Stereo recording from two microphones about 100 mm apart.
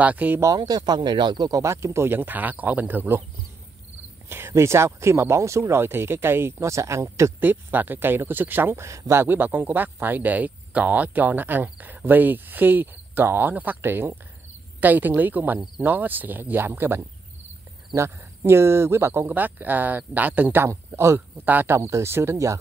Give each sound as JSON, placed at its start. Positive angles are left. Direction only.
{"t": 0.0, "sound": "speech", "side_deg": -15}
{"t": 0.6, "sound": "speech", "side_deg": -45}
{"t": 1.6, "sound": "speech", "side_deg": -30}
{"t": 4.3, "sound": "speech", "side_deg": -25}